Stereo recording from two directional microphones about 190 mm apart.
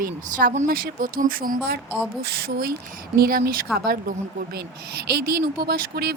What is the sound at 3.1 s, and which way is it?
Speech, 50° right (ahead or behind).